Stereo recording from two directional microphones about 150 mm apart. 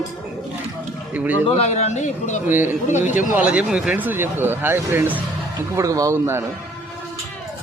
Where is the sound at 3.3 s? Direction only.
10° right (ahead or behind).